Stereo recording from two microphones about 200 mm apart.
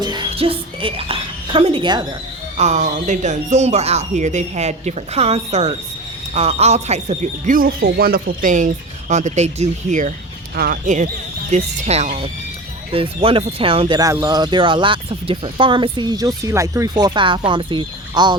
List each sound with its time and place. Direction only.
0.0 s a sound: 20° right (ahead or behind)
2.6 s speech: 35° right (ahead or behind)
10.5 s speech: 50° right (ahead or behind); by 18.3 s 20° right (ahead or behind)